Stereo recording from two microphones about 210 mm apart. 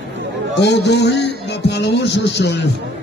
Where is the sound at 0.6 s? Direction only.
55° left (ahead or behind).